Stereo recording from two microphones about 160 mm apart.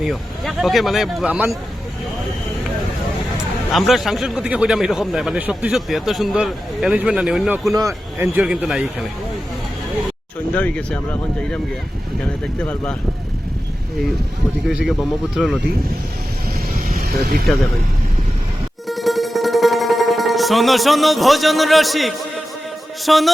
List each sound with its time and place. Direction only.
0.0 s a man's voice: centre (ahead or behind)
3.3 s a man's voice: centre (ahead or behind)
10.5 s speech: 10° left (ahead or behind)
12.6 s speech: 10° left (ahead or behind)
14.7 s a man's voice: 5° right (ahead or behind)
16.7 s vehicle: 60° right (ahead or behind)
18.9 s music: centre (ahead or behind)
23.0 s a man's voice: centre (ahead or behind)